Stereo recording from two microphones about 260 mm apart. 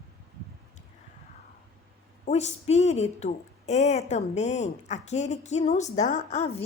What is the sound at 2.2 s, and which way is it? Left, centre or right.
A woman's voice, left.